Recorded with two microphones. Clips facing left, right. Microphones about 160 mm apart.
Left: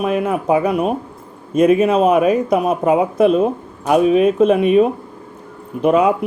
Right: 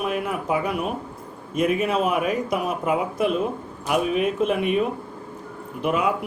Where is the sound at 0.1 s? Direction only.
25° left (ahead or behind).